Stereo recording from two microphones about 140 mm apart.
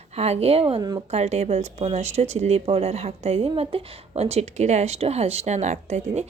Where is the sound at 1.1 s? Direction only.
50° right (ahead or behind).